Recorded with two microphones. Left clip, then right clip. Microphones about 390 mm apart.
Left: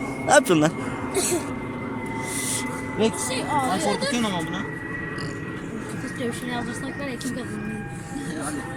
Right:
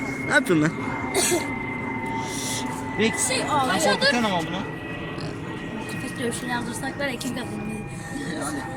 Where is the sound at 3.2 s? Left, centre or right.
Right.